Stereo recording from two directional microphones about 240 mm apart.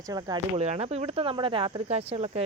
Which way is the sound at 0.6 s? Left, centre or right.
Right.